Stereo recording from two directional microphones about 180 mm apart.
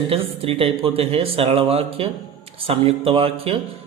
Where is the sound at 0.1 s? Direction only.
30° right (ahead or behind).